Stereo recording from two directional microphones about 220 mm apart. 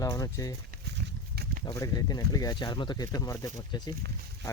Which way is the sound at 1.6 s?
15° left (ahead or behind).